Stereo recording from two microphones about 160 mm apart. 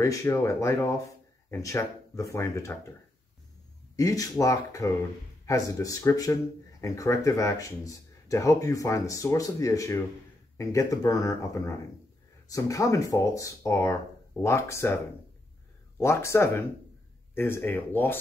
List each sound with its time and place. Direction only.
0.0 s speech: 20° left (ahead or behind)
3.9 s speech: 20° left (ahead or behind)
16.0 s speech: 15° left (ahead or behind)